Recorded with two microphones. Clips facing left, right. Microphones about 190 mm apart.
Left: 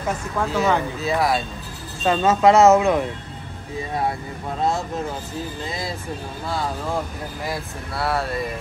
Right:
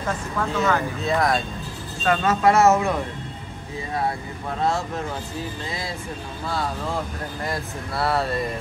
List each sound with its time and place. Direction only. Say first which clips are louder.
0.6 s speech: left 2 dB; 5° left (ahead or behind)
2.0 s speech: left 3 dB; 20° left (ahead or behind)
7.4 s speech: even; centre (ahead or behind)